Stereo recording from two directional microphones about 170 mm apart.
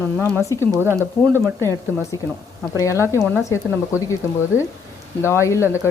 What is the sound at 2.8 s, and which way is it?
Speech, 20° left (ahead or behind).